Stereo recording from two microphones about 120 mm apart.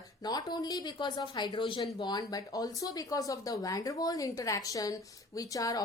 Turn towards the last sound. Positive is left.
turn(degrees=30)  # may be behind; listen again after turning